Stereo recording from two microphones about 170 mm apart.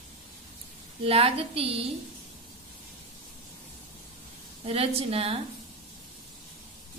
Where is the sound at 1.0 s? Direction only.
35° right (ahead or behind).